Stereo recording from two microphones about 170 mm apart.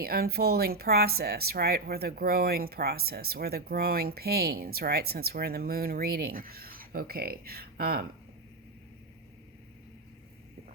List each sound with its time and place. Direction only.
0.0 s speech: 65° right (ahead or behind)